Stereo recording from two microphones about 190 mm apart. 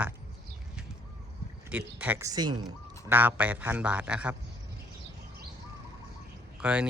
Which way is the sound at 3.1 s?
10° right (ahead or behind).